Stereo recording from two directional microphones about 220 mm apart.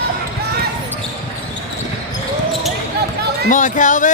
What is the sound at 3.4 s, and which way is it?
Speech, 35° left (ahead or behind).